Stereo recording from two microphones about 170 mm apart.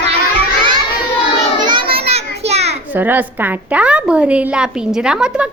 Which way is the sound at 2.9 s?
10° right (ahead or behind).